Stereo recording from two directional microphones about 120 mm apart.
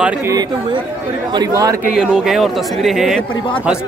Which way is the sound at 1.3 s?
30° right (ahead or behind).